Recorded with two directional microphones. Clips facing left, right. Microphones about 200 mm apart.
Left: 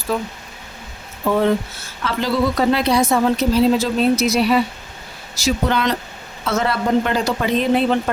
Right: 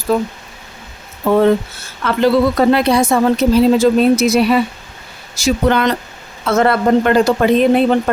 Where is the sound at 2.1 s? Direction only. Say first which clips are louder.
Right 7 dB; 55° right (ahead or behind).